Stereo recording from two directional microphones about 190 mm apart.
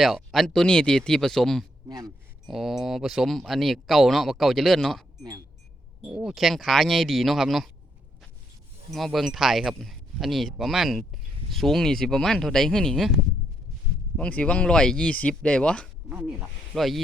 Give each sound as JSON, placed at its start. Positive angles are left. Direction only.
{"t": 0.0, "sound": "speech", "side_deg": 0}
{"t": 1.9, "sound": "speech", "side_deg": -20}
{"t": 2.5, "sound": "speech", "side_deg": 0}
{"t": 6.1, "sound": "speech", "side_deg": -5}
{"t": 8.9, "sound": "speech", "side_deg": 0}
{"t": 14.2, "sound": "speech", "side_deg": 5}